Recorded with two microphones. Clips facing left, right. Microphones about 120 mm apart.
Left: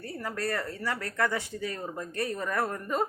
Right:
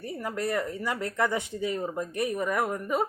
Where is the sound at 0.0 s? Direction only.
15° right (ahead or behind).